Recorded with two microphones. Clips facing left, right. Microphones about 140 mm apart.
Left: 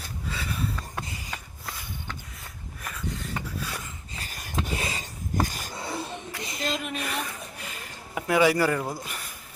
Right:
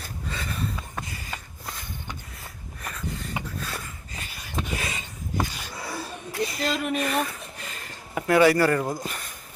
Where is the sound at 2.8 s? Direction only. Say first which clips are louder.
Right 1 dB; centre (ahead or behind).